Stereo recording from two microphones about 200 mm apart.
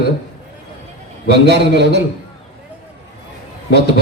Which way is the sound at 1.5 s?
60° right (ahead or behind).